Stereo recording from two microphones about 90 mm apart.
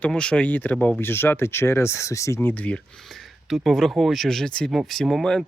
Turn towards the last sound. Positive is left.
turn(degrees=5)  # may be behind; listen again after turning